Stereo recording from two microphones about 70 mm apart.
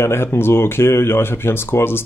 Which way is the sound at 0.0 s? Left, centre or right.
Left.